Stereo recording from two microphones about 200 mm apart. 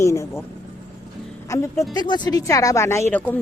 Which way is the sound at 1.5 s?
15° left (ahead or behind).